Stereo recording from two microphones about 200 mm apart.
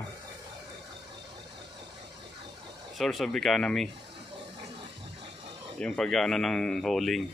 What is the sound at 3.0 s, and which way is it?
Speech, centre (ahead or behind).